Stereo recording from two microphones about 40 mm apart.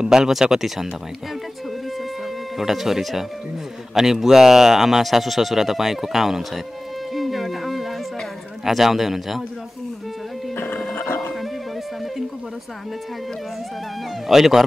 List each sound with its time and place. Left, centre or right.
0.0 s speech: centre
2.5 s speech: centre
7.2 s music: centre
8.6 s speech: centre
10.5 s music: left
14.2 s speech: centre